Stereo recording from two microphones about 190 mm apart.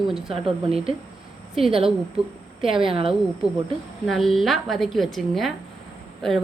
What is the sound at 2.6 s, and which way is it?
Speech, 25° right (ahead or behind).